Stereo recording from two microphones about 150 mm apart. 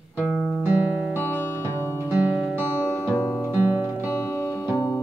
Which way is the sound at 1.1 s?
15° left (ahead or behind).